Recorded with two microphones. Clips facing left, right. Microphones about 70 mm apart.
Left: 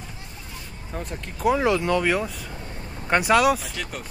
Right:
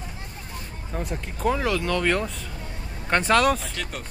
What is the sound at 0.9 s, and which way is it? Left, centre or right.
Speech, centre.